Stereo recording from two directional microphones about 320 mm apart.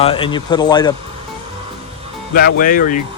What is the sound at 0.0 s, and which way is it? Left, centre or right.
Speech, centre.